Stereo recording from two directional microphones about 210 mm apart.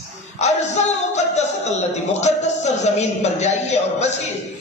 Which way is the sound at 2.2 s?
35° left (ahead or behind).